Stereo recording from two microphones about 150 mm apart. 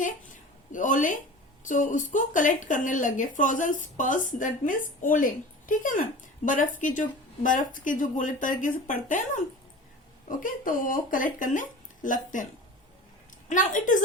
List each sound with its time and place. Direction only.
0.7 s speech: 60° left (ahead or behind)
13.5 s speech: 60° left (ahead or behind)